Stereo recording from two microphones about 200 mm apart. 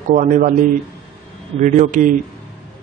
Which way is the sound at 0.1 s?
40° right (ahead or behind).